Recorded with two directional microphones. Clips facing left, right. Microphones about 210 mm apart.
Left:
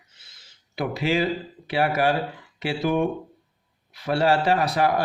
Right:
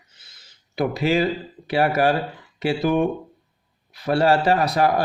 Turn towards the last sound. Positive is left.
turn(degrees=-40)  # may be behind; listen again after turning